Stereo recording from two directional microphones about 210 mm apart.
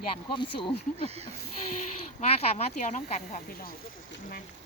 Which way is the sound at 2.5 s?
35° left (ahead or behind).